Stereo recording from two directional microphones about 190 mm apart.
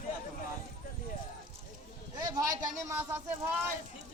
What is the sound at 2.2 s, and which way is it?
A man's voice, 20° right (ahead or behind).